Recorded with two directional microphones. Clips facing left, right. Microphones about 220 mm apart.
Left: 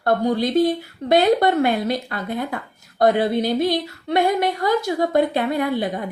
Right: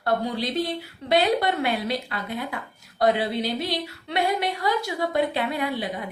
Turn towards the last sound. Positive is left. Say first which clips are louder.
# left 6 dB
turn(degrees=45)  # may be behind; listen again after turning